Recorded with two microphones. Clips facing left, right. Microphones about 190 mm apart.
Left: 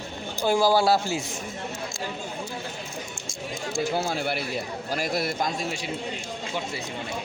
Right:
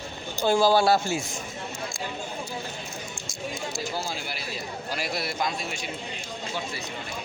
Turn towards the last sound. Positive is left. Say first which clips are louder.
# left 2 dB
turn(degrees=40)  # may be behind; listen again after turning